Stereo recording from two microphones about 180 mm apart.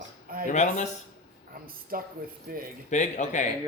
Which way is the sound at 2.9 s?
40° left (ahead or behind).